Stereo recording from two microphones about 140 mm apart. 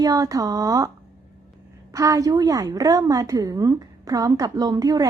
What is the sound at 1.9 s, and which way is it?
A woman's voice, 25° right (ahead or behind).